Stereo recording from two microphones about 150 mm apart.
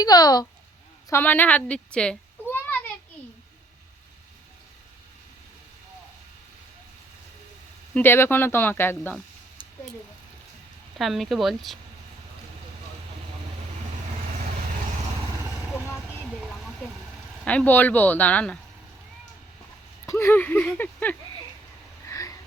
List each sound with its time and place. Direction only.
0.0 s speech: 25° left (ahead or behind)
1.1 s a child's voice: 10° left (ahead or behind)
7.9 s speech: 15° left (ahead or behind)
10.9 s speech: centre (ahead or behind)
15.6 s vehicle: 5° right (ahead or behind)
17.4 s speech: 10° left (ahead or behind)
20.1 s speech: 15° left (ahead or behind)
22.0 s a sound: 20° left (ahead or behind)